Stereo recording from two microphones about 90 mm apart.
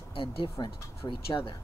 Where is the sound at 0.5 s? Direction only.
50° left (ahead or behind).